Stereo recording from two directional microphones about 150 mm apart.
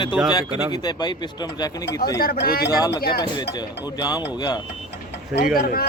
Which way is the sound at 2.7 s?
25° left (ahead or behind).